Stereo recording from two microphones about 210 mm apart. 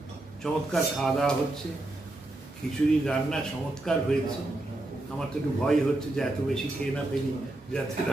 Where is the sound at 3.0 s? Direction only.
5° left (ahead or behind).